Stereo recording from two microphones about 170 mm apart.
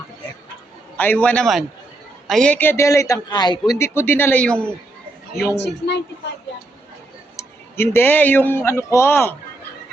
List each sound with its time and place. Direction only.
0.9 s a man's voice: 10° left (ahead or behind)
5.5 s a woman's voice: 90° left
7.3 s speech: 15° left (ahead or behind)